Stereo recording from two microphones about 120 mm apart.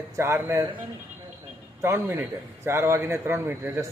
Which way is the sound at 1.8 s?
20° right (ahead or behind).